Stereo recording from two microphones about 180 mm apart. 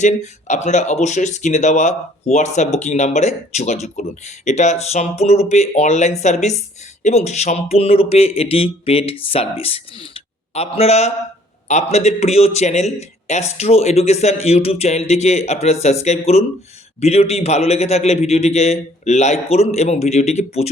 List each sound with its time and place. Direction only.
0.0 s speech: 40° left (ahead or behind)